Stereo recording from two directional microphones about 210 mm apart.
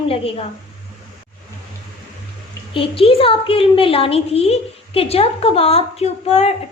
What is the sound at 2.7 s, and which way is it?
A woman's voice, 25° left (ahead or behind).